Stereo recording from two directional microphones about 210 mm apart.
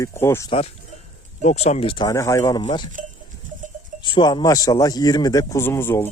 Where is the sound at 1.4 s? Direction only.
30° left (ahead or behind).